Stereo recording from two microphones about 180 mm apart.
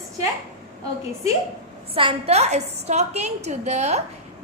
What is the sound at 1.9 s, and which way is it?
A woman's voice, 30° right (ahead or behind).